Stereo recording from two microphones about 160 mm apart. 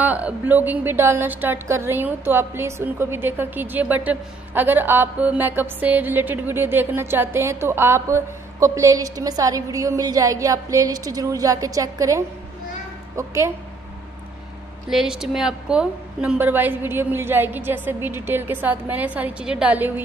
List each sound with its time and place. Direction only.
0.0 s a woman's voice: 10° right (ahead or behind)
14.9 s a woman's voice: 5° right (ahead or behind)